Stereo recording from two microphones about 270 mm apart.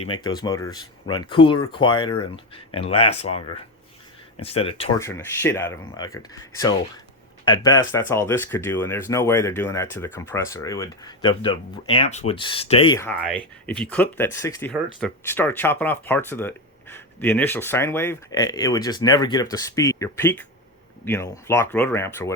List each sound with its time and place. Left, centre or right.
0.0 s speech: centre
4.9 s speech: centre